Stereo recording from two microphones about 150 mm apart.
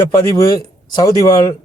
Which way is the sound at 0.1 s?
20° left (ahead or behind).